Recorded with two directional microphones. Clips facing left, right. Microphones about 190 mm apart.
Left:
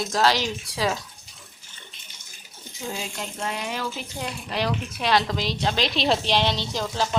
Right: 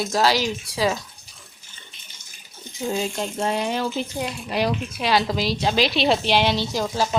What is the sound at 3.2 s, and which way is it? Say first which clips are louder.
Water: right 7 dB; 30° right (ahead or behind).